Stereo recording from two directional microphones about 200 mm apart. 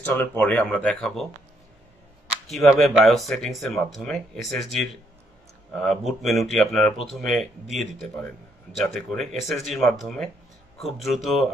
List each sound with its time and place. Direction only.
0.0 s speech: 10° left (ahead or behind)
2.5 s speech: centre (ahead or behind)